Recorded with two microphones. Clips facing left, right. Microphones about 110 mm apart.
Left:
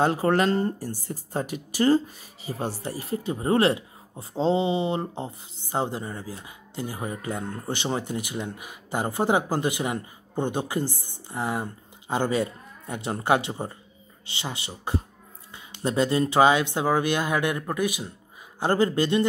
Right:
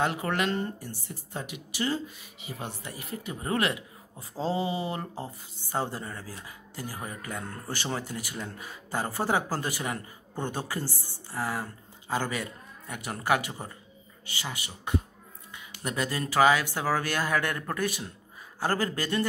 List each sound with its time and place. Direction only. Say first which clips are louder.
0.0 s speech: left 6 dB; 35° left (ahead or behind)